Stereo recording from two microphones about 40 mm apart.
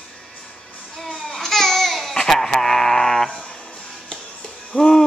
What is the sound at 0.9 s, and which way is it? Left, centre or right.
Babbling, centre.